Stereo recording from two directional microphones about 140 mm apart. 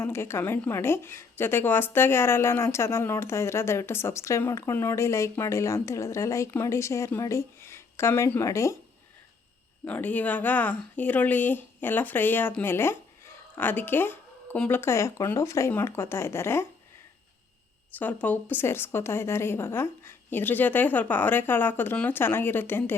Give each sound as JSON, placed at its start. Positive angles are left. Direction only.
{"t": 0.0, "sound": "a woman's voice", "side_deg": 20}
{"t": 9.8, "sound": "speech", "side_deg": 10}
{"t": 17.9, "sound": "speech", "side_deg": 10}